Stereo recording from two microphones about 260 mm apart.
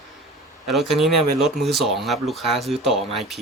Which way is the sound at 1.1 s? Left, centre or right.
Right.